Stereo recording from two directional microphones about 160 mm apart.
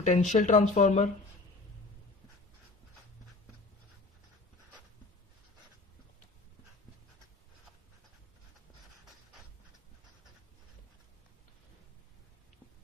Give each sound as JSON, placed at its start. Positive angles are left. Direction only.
{"t": 0.0, "sound": "speech", "side_deg": 50}